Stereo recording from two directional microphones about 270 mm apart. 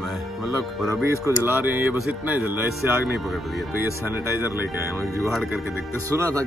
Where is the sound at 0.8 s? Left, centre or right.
Centre.